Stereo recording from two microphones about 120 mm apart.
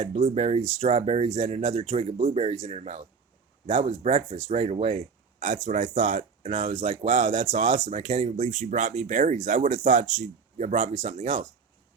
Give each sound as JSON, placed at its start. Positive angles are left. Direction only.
{"t": 0.0, "sound": "speech", "side_deg": -85}
{"t": 3.7, "sound": "speech", "side_deg": -50}
{"t": 4.4, "sound": "speech", "side_deg": -70}
{"t": 4.9, "sound": "speech", "side_deg": -90}
{"t": 6.6, "sound": "speech", "side_deg": -50}
{"t": 7.0, "sound": "speech", "side_deg": -90}